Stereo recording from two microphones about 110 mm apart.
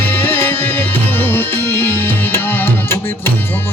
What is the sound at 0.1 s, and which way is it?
Music, 20° left (ahead or behind).